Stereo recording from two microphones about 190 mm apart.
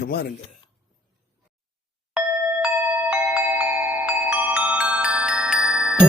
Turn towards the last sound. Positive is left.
turn(degrees=-5)  # may be behind; listen again after turning